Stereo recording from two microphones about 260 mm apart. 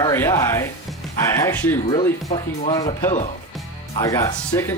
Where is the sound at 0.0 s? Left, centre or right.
Centre.